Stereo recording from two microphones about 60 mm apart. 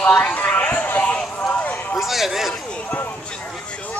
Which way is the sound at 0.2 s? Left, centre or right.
Left.